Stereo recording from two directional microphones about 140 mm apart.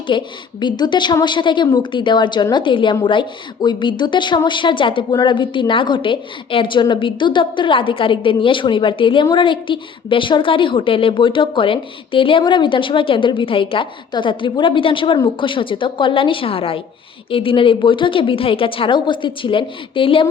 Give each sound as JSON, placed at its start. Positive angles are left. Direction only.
{"t": 0.1, "sound": "a woman's voice", "side_deg": 35}